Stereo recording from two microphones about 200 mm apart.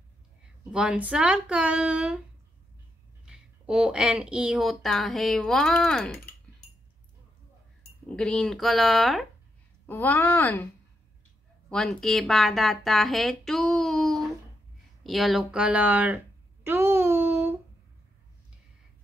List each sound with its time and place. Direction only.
0.4 s speech: 5° right (ahead or behind)
3.3 s speech: 5° right (ahead or behind)
8.2 s a woman's voice: 5° left (ahead or behind)
11.7 s speech: centre (ahead or behind)
16.6 s a sound: 10° right (ahead or behind)